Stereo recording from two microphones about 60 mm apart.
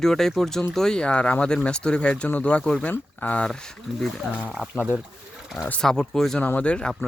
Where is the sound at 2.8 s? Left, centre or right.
Left.